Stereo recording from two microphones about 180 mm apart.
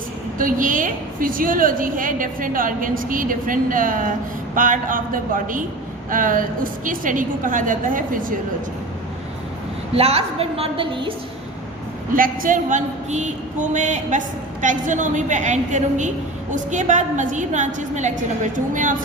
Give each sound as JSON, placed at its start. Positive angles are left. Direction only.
{"t": 0.3, "sound": "a woman's voice", "side_deg": -50}
{"t": 9.9, "sound": "a woman's voice", "side_deg": -35}
{"t": 12.1, "sound": "a woman's voice", "side_deg": -50}